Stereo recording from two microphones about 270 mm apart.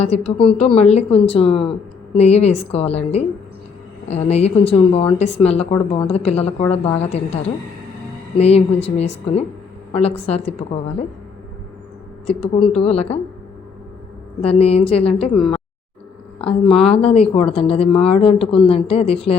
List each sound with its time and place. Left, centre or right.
0.0 s speech: left
8.4 s speech: left
12.2 s speech: left
14.4 s speech: left
16.4 s speech: centre